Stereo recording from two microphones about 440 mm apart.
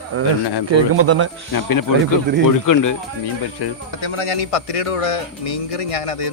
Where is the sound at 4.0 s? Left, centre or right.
Left.